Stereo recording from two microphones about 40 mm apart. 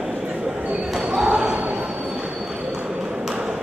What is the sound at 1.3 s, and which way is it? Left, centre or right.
Basketball bounce, right.